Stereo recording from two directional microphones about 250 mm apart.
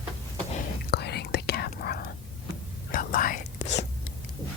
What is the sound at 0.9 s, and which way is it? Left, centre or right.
Whispering, left.